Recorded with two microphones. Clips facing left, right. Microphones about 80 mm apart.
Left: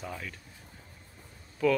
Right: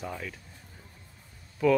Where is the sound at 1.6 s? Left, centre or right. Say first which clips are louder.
Right 3 dB; centre.